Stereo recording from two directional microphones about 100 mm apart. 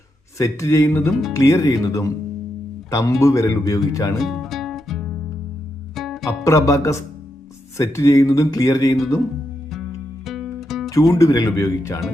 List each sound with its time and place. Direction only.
0.3 s speech: 30° left (ahead or behind)
4.2 s music: centre (ahead or behind)
6.2 s speech: 30° left (ahead or behind)
10.2 s music: centre (ahead or behind)
10.8 s speech: 35° left (ahead or behind)